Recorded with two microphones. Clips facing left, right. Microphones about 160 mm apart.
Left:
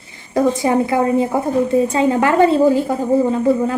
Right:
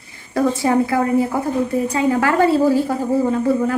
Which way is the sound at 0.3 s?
20° left (ahead or behind).